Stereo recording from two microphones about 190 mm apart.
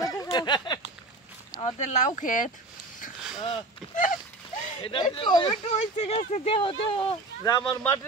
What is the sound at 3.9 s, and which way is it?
Horse, 45° left (ahead or behind).